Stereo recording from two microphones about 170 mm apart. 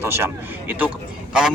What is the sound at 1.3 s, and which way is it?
Speech, 5° right (ahead or behind).